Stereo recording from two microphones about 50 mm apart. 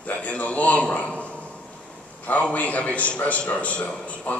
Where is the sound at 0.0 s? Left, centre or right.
Left.